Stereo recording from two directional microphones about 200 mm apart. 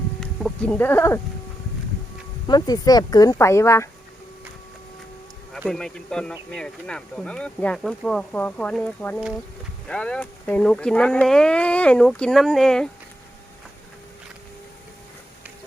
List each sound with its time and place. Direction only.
0.2 s a sound: 5° left (ahead or behind)
2.5 s speech: 20° left (ahead or behind)
5.6 s speech: 5° left (ahead or behind)